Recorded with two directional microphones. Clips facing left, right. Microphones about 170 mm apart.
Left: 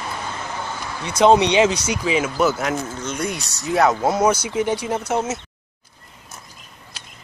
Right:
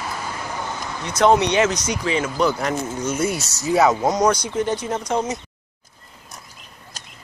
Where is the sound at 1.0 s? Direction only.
10° left (ahead or behind).